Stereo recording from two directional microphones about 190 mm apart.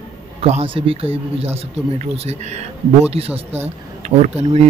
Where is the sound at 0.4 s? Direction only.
30° right (ahead or behind).